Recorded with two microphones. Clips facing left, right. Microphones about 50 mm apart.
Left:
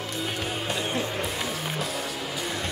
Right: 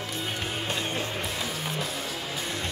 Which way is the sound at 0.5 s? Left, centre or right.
Left.